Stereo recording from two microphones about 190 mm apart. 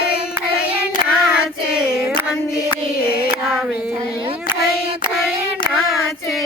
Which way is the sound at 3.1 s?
55° left (ahead or behind).